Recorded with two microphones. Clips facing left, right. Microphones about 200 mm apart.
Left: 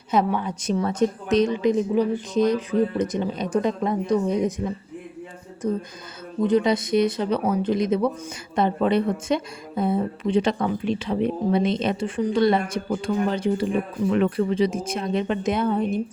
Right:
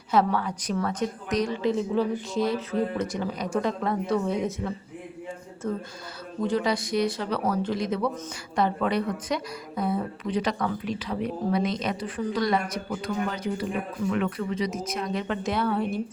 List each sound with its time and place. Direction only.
0.1 s a woman's voice: 20° left (ahead or behind)